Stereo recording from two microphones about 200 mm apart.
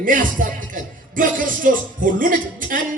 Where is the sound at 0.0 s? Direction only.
45° right (ahead or behind).